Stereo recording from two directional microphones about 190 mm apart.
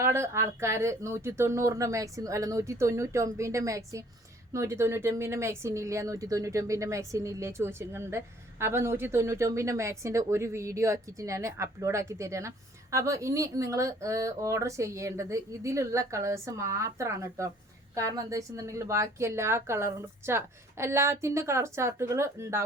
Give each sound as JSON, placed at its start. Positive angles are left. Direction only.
{"t": 0.0, "sound": "speech", "side_deg": -15}